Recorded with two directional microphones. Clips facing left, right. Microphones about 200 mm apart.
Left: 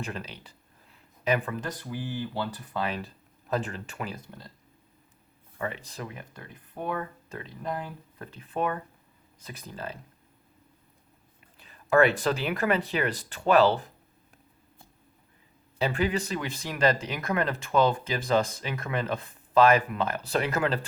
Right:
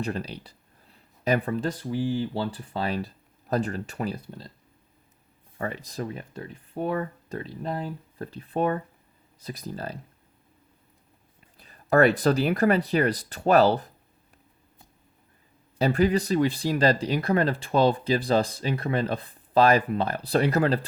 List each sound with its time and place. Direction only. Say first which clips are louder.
0.0 s speech: right 6 dB; 35° right (ahead or behind)
5.5 s speech: right 3 dB; 40° right (ahead or behind)
11.5 s speech: right 2 dB; 40° right (ahead or behind)
15.8 s speech: right 5 dB; 40° right (ahead or behind)